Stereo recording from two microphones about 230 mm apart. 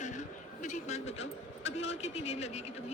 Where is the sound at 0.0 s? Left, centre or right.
Left.